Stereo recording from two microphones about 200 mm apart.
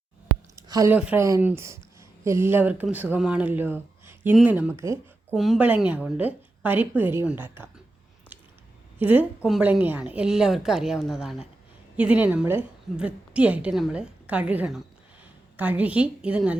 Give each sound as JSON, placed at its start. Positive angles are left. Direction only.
{"t": 0.5, "sound": "a sound", "side_deg": -15}
{"t": 0.9, "sound": "speech", "side_deg": -10}
{"t": 5.3, "sound": "speech", "side_deg": 0}
{"t": 9.0, "sound": "a woman's voice", "side_deg": -10}